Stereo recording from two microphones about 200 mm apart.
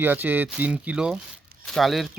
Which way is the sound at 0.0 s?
10° right (ahead or behind).